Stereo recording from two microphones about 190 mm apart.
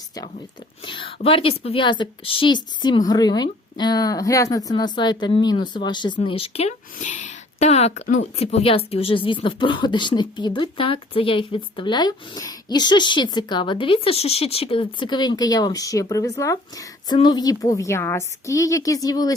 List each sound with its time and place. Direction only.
0.9 s a woman's voice: 30° left (ahead or behind)